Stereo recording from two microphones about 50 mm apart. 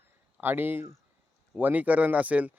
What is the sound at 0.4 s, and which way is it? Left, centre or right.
Speech, right.